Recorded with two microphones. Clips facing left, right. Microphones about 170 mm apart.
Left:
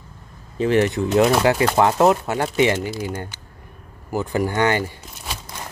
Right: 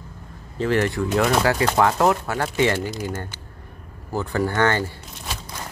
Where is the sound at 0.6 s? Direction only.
20° left (ahead or behind).